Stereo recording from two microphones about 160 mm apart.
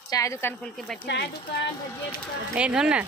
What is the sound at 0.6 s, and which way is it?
Speech, 5° left (ahead or behind).